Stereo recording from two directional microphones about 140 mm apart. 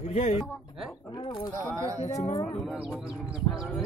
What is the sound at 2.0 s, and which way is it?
Speech, 50° left (ahead or behind).